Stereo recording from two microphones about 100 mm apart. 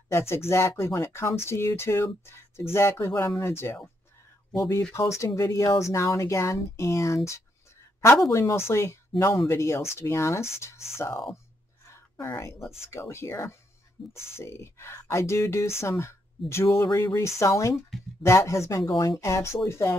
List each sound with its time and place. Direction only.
0.1 s speech: 25° left (ahead or behind)
4.9 s speech: 30° left (ahead or behind)